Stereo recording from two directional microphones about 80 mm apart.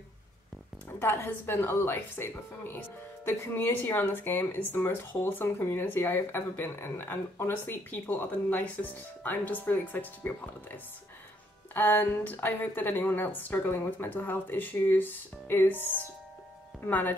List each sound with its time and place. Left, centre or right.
0.9 s speech: left